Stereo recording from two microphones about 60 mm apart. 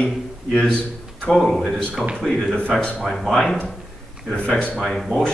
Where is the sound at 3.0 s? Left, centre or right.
Centre.